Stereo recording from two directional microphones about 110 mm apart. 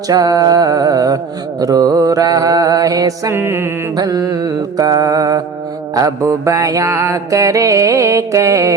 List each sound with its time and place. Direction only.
0.1 s mantra: 35° right (ahead or behind)
3.3 s mantra: 20° right (ahead or behind)
3.9 s mantra: 35° right (ahead or behind)